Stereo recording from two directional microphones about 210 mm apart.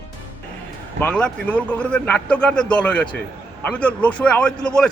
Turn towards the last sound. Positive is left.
turn(degrees=5)  # may be behind; listen again after turning